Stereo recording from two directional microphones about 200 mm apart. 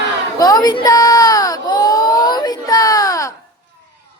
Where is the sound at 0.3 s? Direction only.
20° left (ahead or behind).